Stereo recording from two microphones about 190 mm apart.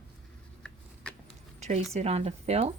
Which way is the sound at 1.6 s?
35° right (ahead or behind).